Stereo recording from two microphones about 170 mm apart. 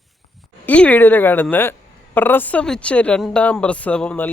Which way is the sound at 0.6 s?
10° left (ahead or behind).